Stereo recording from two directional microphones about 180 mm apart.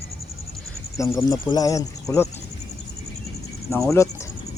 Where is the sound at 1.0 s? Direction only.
20° left (ahead or behind).